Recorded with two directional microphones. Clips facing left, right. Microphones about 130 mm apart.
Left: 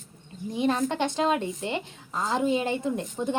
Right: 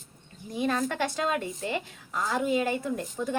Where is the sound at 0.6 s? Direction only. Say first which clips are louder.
Left 2 dB; 20° left (ahead or behind).